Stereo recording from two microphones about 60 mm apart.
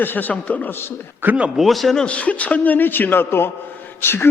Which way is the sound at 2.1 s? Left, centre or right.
Left.